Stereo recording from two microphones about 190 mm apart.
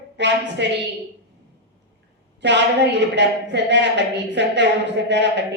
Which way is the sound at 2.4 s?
65° right (ahead or behind).